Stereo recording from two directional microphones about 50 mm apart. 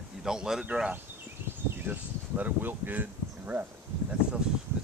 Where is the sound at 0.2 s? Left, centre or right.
Centre.